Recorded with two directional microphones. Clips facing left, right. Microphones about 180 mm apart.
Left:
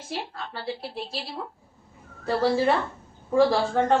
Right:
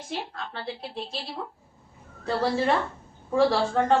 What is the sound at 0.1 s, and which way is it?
A woman's voice, 5° left (ahead or behind).